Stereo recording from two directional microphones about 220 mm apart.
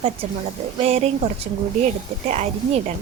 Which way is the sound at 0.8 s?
25° right (ahead or behind).